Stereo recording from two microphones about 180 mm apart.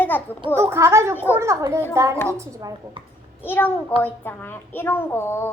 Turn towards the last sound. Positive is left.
turn(degrees=10)  # may be behind; listen again after turning